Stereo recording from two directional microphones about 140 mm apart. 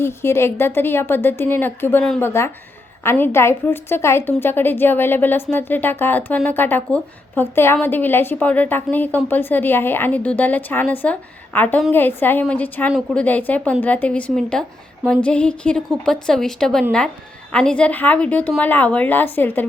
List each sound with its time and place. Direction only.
0.0 s a woman's voice: 20° left (ahead or behind)